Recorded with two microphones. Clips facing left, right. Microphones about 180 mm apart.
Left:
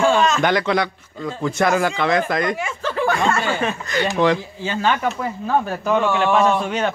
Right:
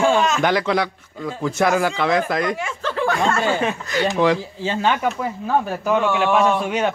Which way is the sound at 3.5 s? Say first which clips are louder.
Right 1 dB; 20° right (ahead or behind).